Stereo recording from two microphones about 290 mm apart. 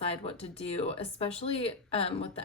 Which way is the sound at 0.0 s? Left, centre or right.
Centre.